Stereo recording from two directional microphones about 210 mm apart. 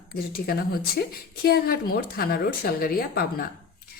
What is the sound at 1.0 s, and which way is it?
A woman's voice, 45° left (ahead or behind).